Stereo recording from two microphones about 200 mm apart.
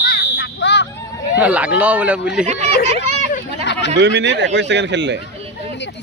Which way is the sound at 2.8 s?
35° right (ahead or behind).